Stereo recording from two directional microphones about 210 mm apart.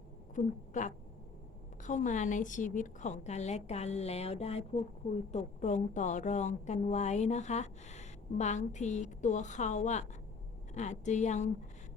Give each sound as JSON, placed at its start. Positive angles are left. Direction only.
{"t": 0.3, "sound": "a woman's voice", "side_deg": 35}